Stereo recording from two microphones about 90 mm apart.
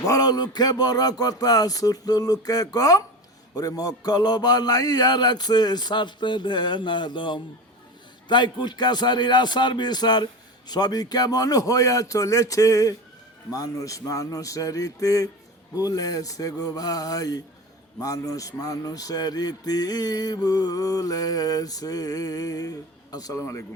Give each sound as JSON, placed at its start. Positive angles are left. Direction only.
{"t": 0.0, "sound": "a man's voice", "side_deg": 40}